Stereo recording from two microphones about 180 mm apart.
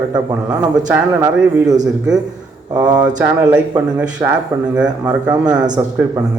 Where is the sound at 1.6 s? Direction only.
20° right (ahead or behind).